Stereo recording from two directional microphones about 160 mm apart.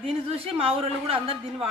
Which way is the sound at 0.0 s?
35° right (ahead or behind).